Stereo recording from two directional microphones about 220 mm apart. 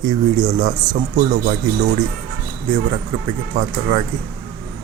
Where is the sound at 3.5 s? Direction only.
25° right (ahead or behind).